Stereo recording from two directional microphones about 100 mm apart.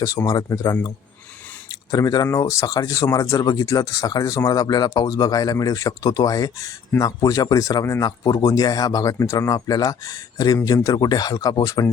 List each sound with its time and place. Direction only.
0.3 s speech: 35° left (ahead or behind)